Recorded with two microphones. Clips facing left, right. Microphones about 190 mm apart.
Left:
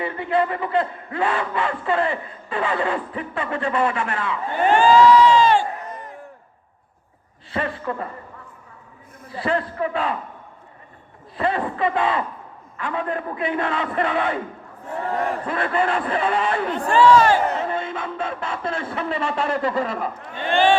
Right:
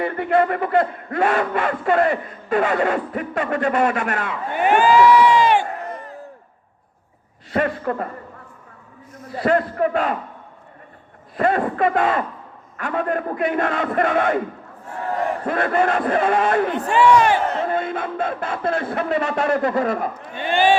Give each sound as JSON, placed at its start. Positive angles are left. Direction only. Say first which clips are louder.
{"t": 0.0, "sound": "speech", "louder": "right 3 dB", "side_deg": -50}
{"t": 4.5, "sound": "speech", "louder": "even", "side_deg": -15}
{"t": 7.5, "sound": "speech", "louder": "right 5 dB", "side_deg": -45}
{"t": 9.3, "sound": "speech", "louder": "right 5 dB", "side_deg": -45}
{"t": 11.3, "sound": "speech", "louder": "right 4 dB", "side_deg": -45}
{"t": 15.4, "sound": "speech", "louder": "right 6 dB", "side_deg": -45}
{"t": 16.9, "sound": "speech", "louder": "left 1 dB", "side_deg": -15}
{"t": 17.7, "sound": "speech", "louder": "right 4 dB", "side_deg": -50}
{"t": 20.3, "sound": "speech", "louder": "even", "side_deg": -10}